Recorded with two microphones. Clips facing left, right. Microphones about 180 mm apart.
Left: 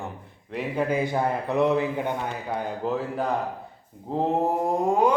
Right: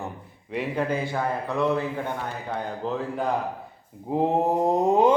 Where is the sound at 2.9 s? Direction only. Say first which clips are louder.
Left 1 dB; 5° left (ahead or behind).